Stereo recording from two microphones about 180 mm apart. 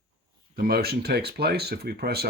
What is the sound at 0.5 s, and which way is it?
Speech, 60° right (ahead or behind).